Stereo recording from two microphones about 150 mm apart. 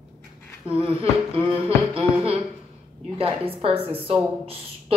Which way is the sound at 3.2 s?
40° right (ahead or behind).